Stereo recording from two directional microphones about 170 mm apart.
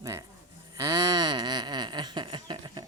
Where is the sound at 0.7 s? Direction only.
20° right (ahead or behind).